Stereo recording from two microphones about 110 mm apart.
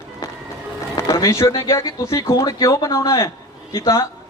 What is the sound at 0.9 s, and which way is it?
A man's voice, 30° left (ahead or behind).